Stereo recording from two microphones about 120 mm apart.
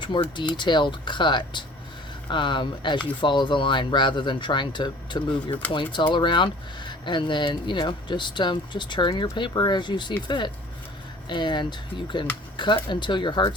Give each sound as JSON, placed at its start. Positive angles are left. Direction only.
{"t": 0.0, "sound": "speech", "side_deg": 40}